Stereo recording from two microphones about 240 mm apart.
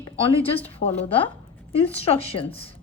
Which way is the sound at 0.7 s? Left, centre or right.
Left.